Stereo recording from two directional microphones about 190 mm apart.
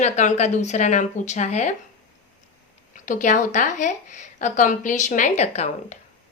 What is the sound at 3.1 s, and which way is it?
A woman's voice, 40° left (ahead or behind).